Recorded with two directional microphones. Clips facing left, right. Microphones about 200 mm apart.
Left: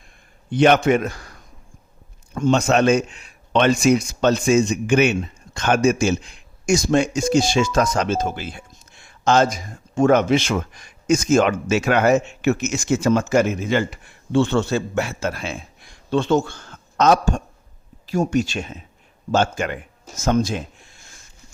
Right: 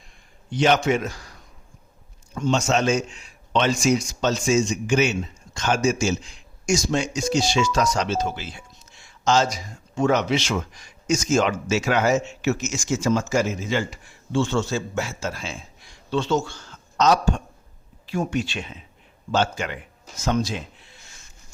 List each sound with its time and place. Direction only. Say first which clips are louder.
0.5 s a man's voice: left 5 dB; 55° left (ahead or behind)